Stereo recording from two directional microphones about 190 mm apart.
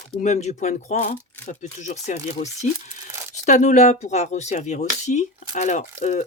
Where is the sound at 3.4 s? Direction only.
40° left (ahead or behind).